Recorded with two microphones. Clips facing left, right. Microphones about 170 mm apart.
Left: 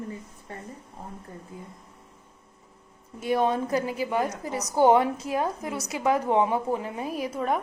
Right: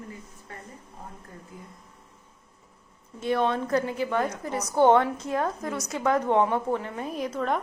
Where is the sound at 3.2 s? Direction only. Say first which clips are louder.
Left 1 dB; 10° left (ahead or behind).